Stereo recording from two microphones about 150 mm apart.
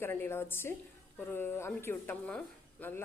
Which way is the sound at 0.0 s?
15° left (ahead or behind).